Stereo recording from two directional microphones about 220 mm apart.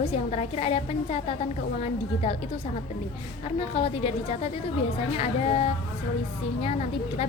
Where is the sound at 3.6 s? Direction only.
25° left (ahead or behind).